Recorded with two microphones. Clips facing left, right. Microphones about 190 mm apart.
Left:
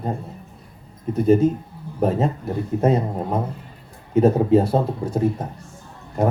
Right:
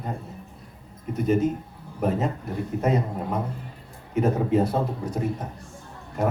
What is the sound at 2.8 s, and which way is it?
Speech, 30° left (ahead or behind).